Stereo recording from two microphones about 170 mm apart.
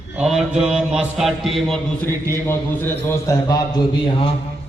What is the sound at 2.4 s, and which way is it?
A man's voice, 15° left (ahead or behind).